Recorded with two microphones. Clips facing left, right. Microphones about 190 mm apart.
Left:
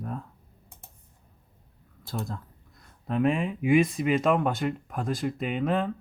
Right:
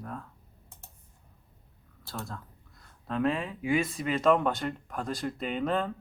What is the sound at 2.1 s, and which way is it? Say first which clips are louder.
Speech: left 5 dB; 15° left (ahead or behind).